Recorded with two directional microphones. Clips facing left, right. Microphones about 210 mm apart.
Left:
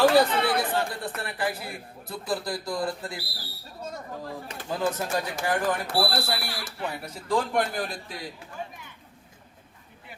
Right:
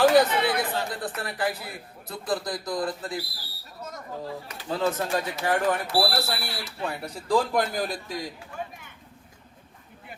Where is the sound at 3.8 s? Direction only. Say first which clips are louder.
Left 2 dB; 30° left (ahead or behind).